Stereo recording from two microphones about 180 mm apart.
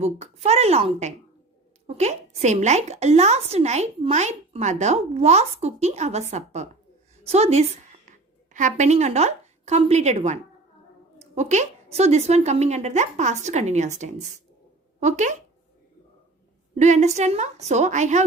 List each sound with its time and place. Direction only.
0.0 s a woman's voice: 35° right (ahead or behind)
16.7 s a woman's voice: 40° right (ahead or behind)